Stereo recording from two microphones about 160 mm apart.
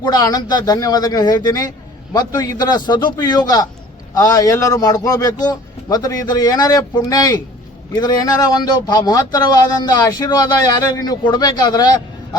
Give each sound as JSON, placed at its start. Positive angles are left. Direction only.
{"t": 0.0, "sound": "speech", "side_deg": 25}